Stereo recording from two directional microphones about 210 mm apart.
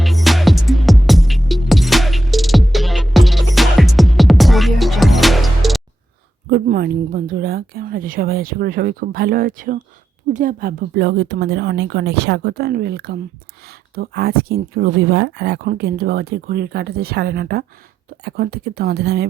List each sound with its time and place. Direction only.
0.0 s music: centre (ahead or behind)
6.5 s speech: 50° right (ahead or behind)